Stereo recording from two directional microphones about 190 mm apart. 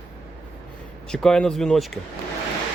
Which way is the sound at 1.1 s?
5° left (ahead or behind).